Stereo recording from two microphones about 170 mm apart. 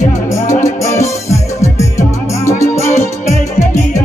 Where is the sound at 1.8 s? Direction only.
15° left (ahead or behind).